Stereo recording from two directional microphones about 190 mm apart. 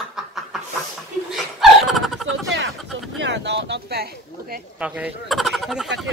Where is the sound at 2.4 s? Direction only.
70° right (ahead or behind).